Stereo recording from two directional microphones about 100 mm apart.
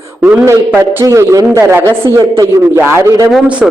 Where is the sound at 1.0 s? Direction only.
35° right (ahead or behind).